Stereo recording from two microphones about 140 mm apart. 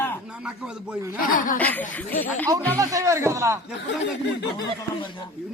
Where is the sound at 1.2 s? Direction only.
75° left (ahead or behind).